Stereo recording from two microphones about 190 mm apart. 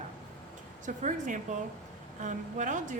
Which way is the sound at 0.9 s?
40° right (ahead or behind).